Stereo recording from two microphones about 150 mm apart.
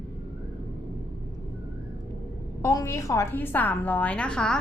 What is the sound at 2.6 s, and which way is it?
A woman's voice, 20° left (ahead or behind).